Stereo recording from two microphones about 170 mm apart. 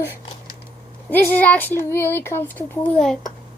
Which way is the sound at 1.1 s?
10° left (ahead or behind).